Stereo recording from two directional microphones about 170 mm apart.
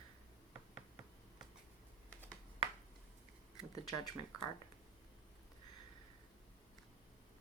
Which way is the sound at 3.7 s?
20° left (ahead or behind).